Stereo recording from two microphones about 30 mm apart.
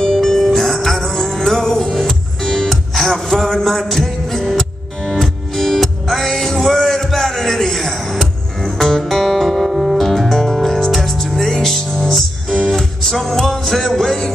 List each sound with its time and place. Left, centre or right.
0.1 s music: centre
2.7 s music: centre
9.0 s music: centre
9.7 s music: centre
9.9 s music: centre